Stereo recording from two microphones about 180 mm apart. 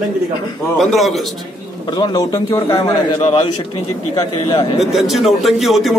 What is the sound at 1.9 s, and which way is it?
A man's voice, 25° left (ahead or behind).